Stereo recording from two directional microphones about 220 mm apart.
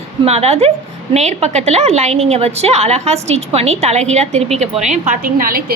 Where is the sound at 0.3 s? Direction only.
30° right (ahead or behind).